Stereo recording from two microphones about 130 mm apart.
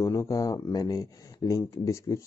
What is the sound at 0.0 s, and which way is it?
Speech, 25° left (ahead or behind).